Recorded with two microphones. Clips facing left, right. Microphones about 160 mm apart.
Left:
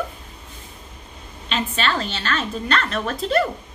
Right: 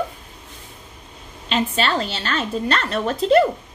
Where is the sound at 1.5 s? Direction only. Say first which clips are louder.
Right 3 dB; 30° right (ahead or behind).